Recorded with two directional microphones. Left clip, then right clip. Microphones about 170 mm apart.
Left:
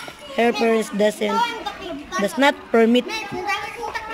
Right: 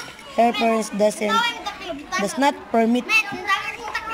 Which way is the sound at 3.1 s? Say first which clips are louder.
Right 5 dB; 25° left (ahead or behind).